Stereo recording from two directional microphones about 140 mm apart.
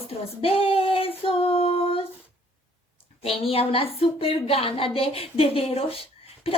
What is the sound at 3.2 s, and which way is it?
A woman's voice, 45° left (ahead or behind).